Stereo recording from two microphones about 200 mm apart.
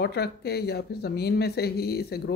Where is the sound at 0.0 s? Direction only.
55° left (ahead or behind).